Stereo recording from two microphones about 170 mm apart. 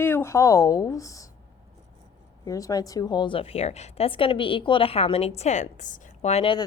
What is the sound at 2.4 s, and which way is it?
A woman's voice, 20° left (ahead or behind).